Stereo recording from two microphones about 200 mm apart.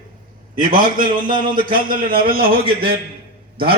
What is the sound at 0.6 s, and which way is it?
A man's voice, 40° right (ahead or behind).